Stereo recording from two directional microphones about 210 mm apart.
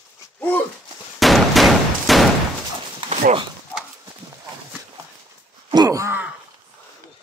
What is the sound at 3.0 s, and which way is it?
Clip-clop, 30° right (ahead or behind).